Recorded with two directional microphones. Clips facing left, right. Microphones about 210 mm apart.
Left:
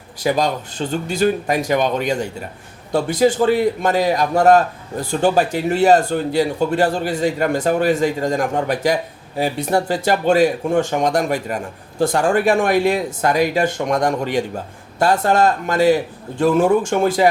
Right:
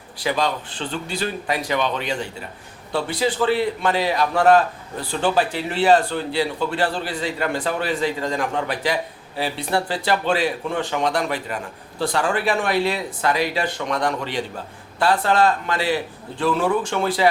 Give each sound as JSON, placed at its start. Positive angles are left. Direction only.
{"t": 0.2, "sound": "a man's voice", "side_deg": 45}